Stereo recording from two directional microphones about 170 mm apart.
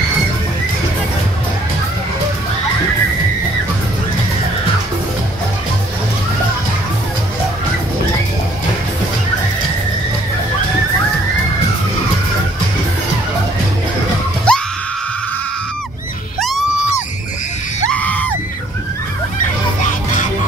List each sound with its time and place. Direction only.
14.5 s screaming: 5° left (ahead or behind)
16.3 s screaming: centre (ahead or behind)
17.8 s screaming: 10° left (ahead or behind)
19.8 s music: 45° left (ahead or behind)